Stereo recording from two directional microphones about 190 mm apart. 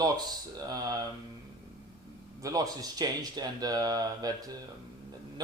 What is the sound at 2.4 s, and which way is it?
Speech, 20° right (ahead or behind).